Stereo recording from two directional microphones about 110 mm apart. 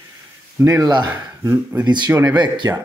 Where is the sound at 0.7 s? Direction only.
35° right (ahead or behind).